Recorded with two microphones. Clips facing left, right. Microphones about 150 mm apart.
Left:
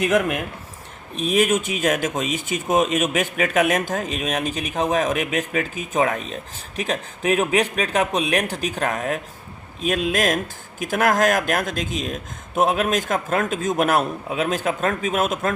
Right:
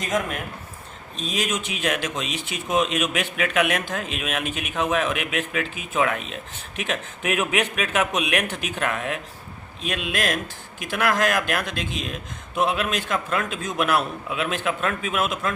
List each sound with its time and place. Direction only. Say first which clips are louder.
0.0 s speech: left 6 dB; 70° left (ahead or behind); by 15.5 s 45° left (ahead or behind)